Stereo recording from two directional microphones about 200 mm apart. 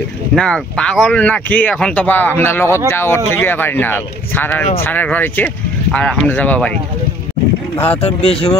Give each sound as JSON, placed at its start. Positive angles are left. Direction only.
{"t": 0.4, "sound": "speech", "side_deg": 5}
{"t": 7.8, "sound": "speech", "side_deg": 30}